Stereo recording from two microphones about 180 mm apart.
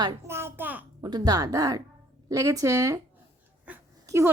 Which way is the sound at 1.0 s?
25° right (ahead or behind).